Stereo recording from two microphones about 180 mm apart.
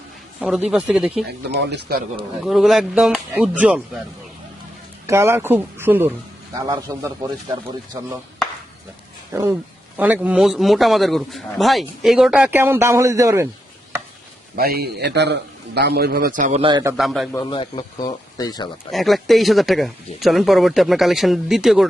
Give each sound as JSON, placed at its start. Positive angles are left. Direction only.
{"t": 0.4, "sound": "a man's voice", "side_deg": 0}
{"t": 1.5, "sound": "speech", "side_deg": -70}
{"t": 2.4, "sound": "a man's voice", "side_deg": 0}
{"t": 5.0, "sound": "a man's voice", "side_deg": -15}
{"t": 9.3, "sound": "a man's voice", "side_deg": -15}
{"t": 14.5, "sound": "a man's voice", "side_deg": -60}
{"t": 17.0, "sound": "a man's voice", "side_deg": 0}
{"t": 17.3, "sound": "speech", "side_deg": 25}
{"t": 18.9, "sound": "a man's voice", "side_deg": 0}